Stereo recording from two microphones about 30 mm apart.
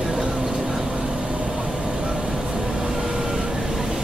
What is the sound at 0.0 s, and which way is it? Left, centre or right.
Vehicle, centre.